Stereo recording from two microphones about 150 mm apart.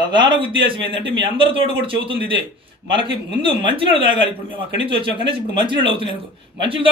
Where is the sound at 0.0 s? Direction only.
30° right (ahead or behind).